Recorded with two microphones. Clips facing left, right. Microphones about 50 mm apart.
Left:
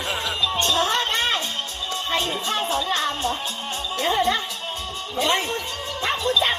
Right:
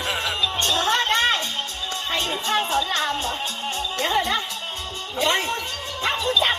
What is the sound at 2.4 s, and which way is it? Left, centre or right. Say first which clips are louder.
Music: right 2 dB; right.